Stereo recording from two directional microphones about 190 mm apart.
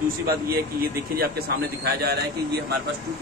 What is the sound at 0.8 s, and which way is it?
A man's voice, 55° right (ahead or behind).